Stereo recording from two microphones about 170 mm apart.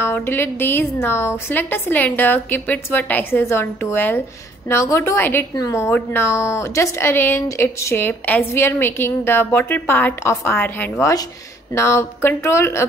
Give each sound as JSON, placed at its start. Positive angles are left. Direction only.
{"t": 0.0, "sound": "a woman's voice", "side_deg": 15}